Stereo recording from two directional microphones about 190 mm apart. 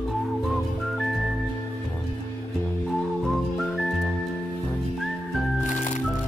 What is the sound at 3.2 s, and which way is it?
Music, centre (ahead or behind).